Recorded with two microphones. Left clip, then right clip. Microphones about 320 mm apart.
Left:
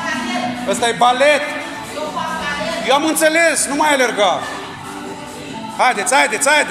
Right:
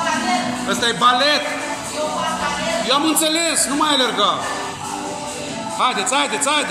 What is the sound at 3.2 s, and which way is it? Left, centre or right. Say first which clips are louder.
Speech: left 6 dB; left.